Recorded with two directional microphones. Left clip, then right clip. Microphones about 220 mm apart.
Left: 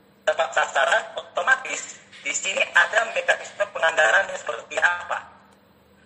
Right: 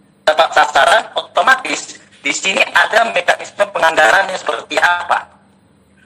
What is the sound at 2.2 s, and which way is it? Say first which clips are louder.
Speech: right 10 dB; 45° right (ahead or behind).